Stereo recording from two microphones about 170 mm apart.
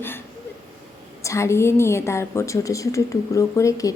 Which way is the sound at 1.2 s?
15° left (ahead or behind).